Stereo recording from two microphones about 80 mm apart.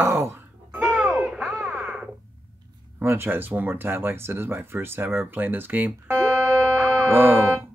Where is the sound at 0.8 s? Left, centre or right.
Centre.